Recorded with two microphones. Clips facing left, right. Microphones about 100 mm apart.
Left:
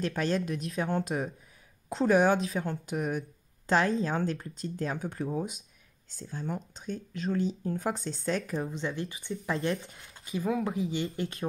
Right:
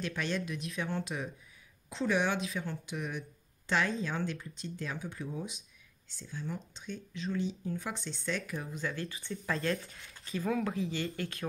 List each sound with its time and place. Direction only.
0.0 s speech: 40° left (ahead or behind)
10.2 s speech: 15° left (ahead or behind)